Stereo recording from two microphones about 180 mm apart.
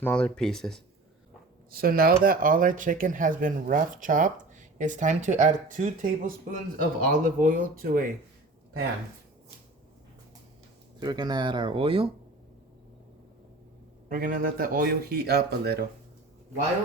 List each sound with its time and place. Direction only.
0.0 s speech: 5° left (ahead or behind)
1.7 s speech: 55° right (ahead or behind)
11.0 s speech: 25° right (ahead or behind)
14.1 s speech: 50° right (ahead or behind)